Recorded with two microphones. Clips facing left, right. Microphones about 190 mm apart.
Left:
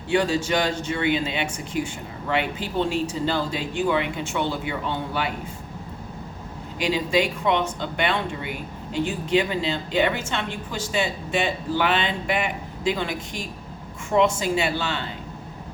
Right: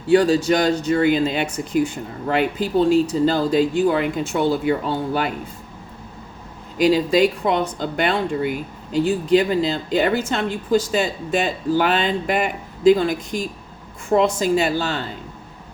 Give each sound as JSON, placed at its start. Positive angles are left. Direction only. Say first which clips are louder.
{"t": 0.1, "sound": "speech", "louder": "right 7 dB", "side_deg": -35}
{"t": 6.7, "sound": "speech", "louder": "right 6 dB", "side_deg": -40}